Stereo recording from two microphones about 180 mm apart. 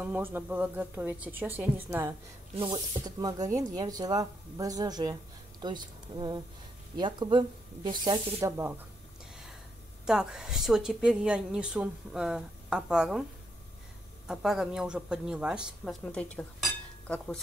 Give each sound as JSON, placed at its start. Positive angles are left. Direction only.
{"t": 0.0, "sound": "a woman's voice", "side_deg": -10}
{"t": 2.6, "sound": "speech", "side_deg": -25}
{"t": 10.0, "sound": "a woman's voice", "side_deg": -5}
{"t": 14.2, "sound": "a woman's voice", "side_deg": -5}